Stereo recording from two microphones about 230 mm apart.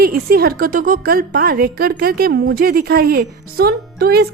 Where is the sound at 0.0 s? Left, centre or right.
Right.